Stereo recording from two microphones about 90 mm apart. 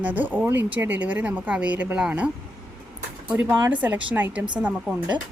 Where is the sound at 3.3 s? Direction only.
20° right (ahead or behind).